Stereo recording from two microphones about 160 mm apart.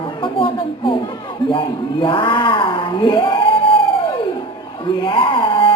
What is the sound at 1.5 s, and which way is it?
Speech, 30° left (ahead or behind).